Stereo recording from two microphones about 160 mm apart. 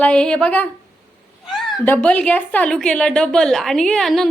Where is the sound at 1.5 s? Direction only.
Centre (ahead or behind).